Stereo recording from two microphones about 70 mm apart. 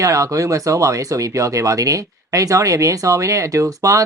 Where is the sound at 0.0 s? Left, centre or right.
Right.